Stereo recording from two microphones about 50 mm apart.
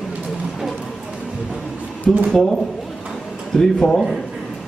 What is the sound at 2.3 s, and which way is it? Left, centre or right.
Speech, centre.